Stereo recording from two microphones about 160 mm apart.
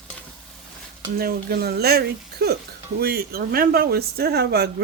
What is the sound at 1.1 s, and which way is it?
Speech, 75° right (ahead or behind).